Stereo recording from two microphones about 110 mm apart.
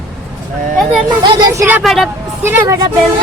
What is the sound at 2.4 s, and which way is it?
Speech, 25° right (ahead or behind).